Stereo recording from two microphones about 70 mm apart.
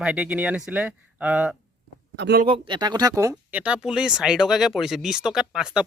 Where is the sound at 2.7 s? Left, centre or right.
Right.